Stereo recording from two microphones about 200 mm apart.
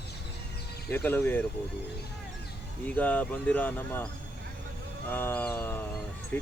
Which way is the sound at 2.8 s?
5° left (ahead or behind).